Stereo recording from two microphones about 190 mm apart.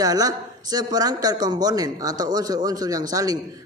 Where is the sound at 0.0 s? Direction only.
20° right (ahead or behind).